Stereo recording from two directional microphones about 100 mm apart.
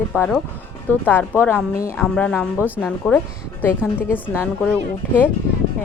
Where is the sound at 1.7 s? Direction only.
35° left (ahead or behind).